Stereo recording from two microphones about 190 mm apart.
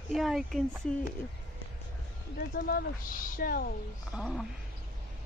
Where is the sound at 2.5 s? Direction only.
55° left (ahead or behind).